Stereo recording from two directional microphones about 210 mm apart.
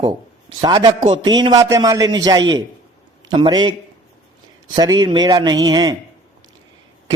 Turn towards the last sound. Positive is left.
turn(degrees=-20)  # may be behind; listen again after turning